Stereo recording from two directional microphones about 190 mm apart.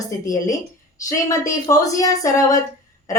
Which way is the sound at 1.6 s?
20° left (ahead or behind).